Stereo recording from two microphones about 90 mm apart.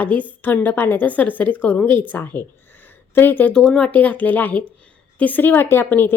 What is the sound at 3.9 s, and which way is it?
A woman's voice, 20° left (ahead or behind).